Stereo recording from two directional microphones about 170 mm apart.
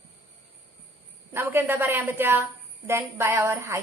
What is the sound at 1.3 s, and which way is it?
A woman's voice, 15° right (ahead or behind).